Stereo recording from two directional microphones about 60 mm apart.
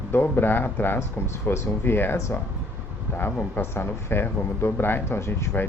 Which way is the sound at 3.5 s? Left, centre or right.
Left.